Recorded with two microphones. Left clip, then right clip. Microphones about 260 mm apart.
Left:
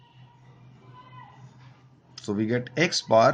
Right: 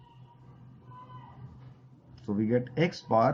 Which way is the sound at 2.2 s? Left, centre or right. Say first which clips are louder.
Left 2 dB; left.